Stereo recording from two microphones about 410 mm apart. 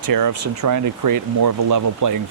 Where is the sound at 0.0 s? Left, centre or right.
Right.